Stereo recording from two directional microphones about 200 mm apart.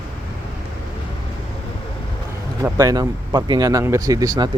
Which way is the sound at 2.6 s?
15° right (ahead or behind).